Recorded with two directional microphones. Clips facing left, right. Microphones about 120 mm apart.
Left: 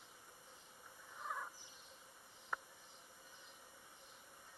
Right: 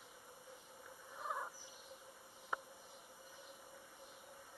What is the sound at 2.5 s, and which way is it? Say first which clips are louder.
Insect: right 2 dB; 15° right (ahead or behind).